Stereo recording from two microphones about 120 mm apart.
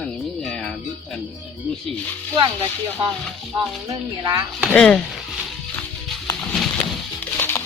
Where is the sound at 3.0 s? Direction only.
40° right (ahead or behind).